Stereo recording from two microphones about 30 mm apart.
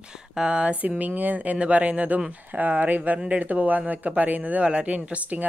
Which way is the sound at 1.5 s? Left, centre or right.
Right.